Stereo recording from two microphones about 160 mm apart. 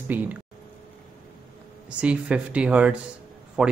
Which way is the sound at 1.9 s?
5° right (ahead or behind).